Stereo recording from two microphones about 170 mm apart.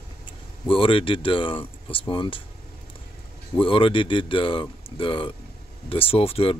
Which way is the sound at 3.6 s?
30° left (ahead or behind).